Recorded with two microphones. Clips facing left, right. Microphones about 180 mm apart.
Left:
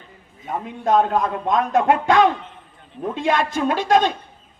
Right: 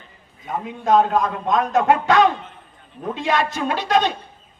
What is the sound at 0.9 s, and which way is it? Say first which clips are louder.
A man's voice: right 1 dB; 55° left (ahead or behind).